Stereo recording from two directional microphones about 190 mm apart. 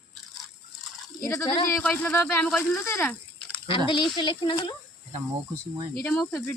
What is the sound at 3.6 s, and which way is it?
Speech, 25° left (ahead or behind).